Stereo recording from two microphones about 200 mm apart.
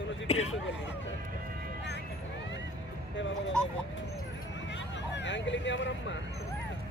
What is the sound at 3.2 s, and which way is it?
Speech, 65° left (ahead or behind).